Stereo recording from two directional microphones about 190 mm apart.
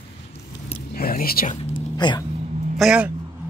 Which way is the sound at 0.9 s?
50° left (ahead or behind).